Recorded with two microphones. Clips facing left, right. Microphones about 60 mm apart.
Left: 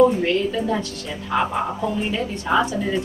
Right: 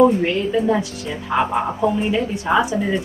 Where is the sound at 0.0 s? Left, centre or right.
Centre.